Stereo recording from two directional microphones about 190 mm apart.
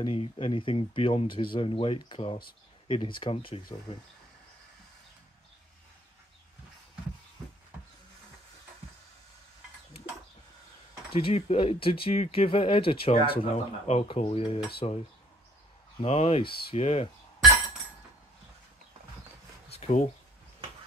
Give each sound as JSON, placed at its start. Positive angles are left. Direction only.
{"t": 0.0, "sound": "speech", "side_deg": 30}
{"t": 11.1, "sound": "speech", "side_deg": 30}
{"t": 16.0, "sound": "speech", "side_deg": 35}
{"t": 19.7, "sound": "a sound", "side_deg": 35}